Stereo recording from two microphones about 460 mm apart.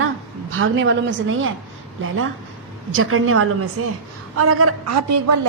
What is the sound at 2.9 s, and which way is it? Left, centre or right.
A woman's voice, right.